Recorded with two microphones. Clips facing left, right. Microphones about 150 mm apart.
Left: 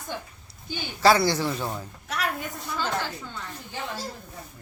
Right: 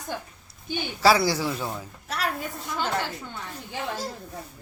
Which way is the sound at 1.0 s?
5° right (ahead or behind).